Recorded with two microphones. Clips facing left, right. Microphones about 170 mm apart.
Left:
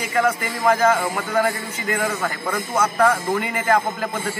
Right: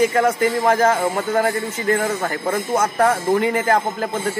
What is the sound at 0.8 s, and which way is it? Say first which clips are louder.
Speech: right 2 dB; 25° right (ahead or behind).